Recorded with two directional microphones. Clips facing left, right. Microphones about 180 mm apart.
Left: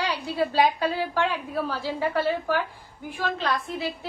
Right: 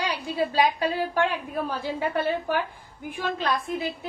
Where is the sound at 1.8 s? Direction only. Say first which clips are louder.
Left 1 dB; 20° right (ahead or behind).